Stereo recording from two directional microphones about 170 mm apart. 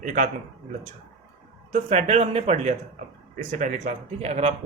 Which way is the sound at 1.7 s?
40° right (ahead or behind).